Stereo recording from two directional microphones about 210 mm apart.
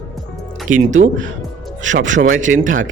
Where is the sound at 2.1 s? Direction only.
35° right (ahead or behind).